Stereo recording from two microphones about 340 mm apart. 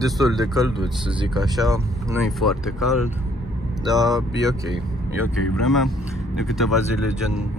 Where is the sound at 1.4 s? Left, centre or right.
Centre.